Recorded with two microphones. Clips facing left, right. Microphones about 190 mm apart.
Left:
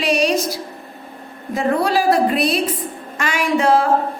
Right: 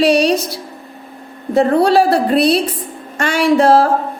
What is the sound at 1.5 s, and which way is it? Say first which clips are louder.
A woman's voice: right 7 dB; 30° right (ahead or behind).